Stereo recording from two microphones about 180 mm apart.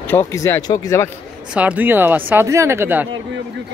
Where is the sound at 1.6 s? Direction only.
10° right (ahead or behind).